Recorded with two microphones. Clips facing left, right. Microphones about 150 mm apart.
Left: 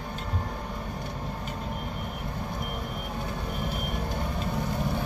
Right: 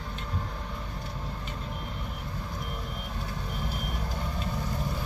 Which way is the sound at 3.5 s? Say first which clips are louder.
Left 3 dB; 55° left (ahead or behind).